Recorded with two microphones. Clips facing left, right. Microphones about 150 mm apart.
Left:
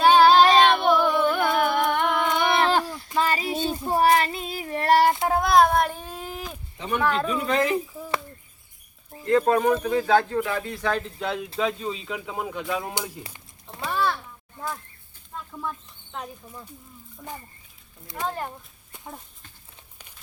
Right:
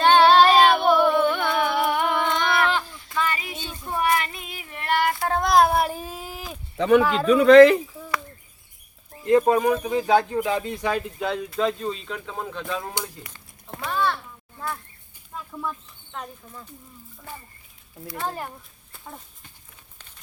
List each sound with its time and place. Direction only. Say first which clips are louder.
0.0 s music: even; 5° left (ahead or behind)
2.4 s a sound: left 3 dB; 20° left (ahead or behind)
3.2 s child singing: left 4 dB; 35° left (ahead or behind)
5.3 s child singing: right 3 dB; centre (ahead or behind)
6.7 s speech: right 12 dB; 90° right
7.0 s speech: right 1 dB; 10° right (ahead or behind)
7.3 s speech: right 12 dB; 85° right
9.2 s speech: right 2 dB; 15° right (ahead or behind)
11.3 s speech: right 2 dB; centre (ahead or behind)
13.9 s a sound: right 1 dB; 5° left (ahead or behind)
16.1 s speech: even; 10° left (ahead or behind)